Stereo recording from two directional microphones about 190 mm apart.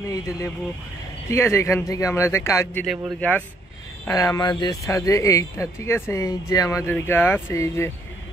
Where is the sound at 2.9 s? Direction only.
Centre (ahead or behind).